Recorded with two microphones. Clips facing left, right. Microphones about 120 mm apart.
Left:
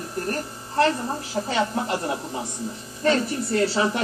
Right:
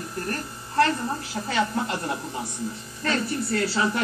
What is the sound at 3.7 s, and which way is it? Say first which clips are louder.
Speech: left 2 dB; 30° left (ahead or behind).